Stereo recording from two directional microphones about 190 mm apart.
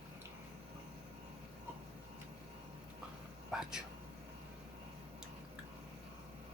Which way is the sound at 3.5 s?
5° right (ahead or behind).